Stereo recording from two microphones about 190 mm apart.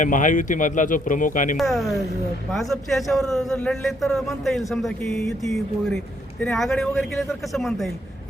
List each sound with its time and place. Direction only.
0.0 s speech: 45° left (ahead or behind)
1.5 s a man's voice: centre (ahead or behind)